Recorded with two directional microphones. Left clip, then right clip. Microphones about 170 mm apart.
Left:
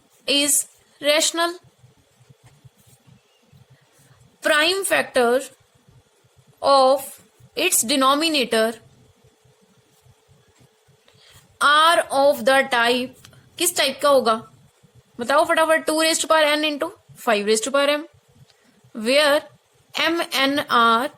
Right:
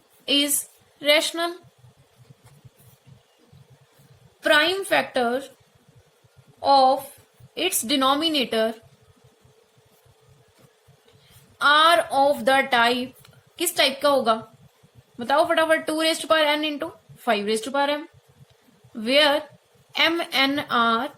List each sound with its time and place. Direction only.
0.3 s a woman's voice: 40° left (ahead or behind)
4.4 s a woman's voice: 45° left (ahead or behind)
6.6 s a woman's voice: 50° left (ahead or behind)
11.5 s a woman's voice: 40° left (ahead or behind)